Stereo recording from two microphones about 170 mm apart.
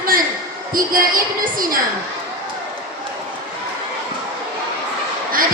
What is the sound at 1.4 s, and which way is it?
Speech, 55° right (ahead or behind).